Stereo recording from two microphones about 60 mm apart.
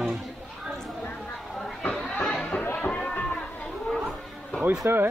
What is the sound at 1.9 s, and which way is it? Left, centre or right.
Chatter, centre.